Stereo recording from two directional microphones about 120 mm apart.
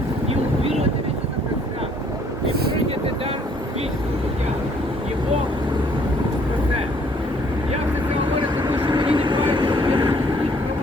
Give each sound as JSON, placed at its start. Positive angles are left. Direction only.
{"t": 8.9, "sound": "vehicle", "side_deg": -40}